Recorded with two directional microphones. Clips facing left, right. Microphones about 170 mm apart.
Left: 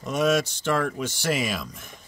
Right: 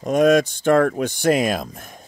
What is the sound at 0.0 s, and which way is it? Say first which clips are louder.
Speech: right 7 dB; 50° right (ahead or behind).